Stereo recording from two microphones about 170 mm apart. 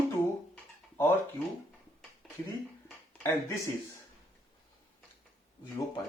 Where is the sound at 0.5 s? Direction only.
10° left (ahead or behind).